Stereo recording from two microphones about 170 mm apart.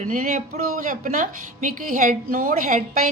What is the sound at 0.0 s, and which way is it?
A woman's voice, 50° right (ahead or behind).